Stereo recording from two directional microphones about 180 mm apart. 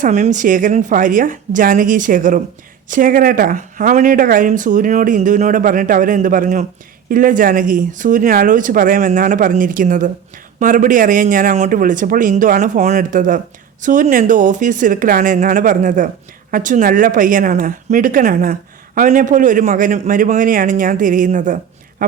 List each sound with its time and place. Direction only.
0.0 s speech: 45° right (ahead or behind)